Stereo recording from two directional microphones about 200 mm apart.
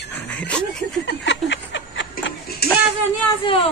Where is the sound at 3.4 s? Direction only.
30° left (ahead or behind).